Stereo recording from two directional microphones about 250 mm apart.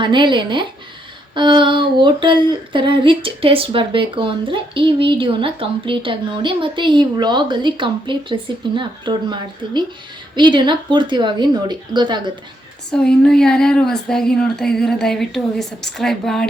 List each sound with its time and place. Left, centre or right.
0.0 s a sound: centre
10.3 s speech: centre
12.9 s a woman's voice: centre